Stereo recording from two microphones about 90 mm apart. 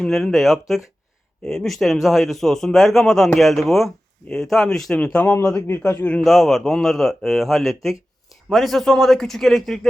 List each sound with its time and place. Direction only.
0.0 s speech: 5° left (ahead or behind)
5.6 s a man's voice: 25° left (ahead or behind)
6.2 s speech: centre (ahead or behind)